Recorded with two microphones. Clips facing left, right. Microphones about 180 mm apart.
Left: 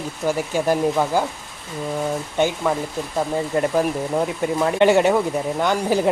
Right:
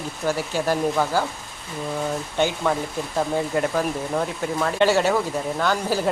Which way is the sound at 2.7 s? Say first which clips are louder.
Left 1 dB; 5° left (ahead or behind).